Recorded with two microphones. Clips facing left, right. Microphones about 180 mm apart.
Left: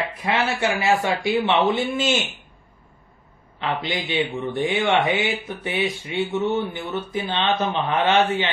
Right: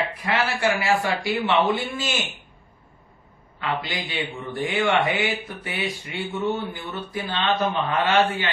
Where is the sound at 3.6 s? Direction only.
25° left (ahead or behind).